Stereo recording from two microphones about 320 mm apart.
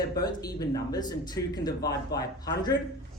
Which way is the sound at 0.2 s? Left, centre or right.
Centre.